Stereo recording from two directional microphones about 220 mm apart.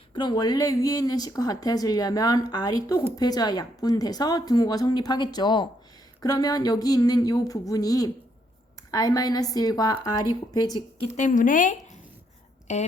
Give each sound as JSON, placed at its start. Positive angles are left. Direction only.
{"t": 0.1, "sound": "speech", "side_deg": 20}
{"t": 11.2, "sound": "a woman's voice", "side_deg": 35}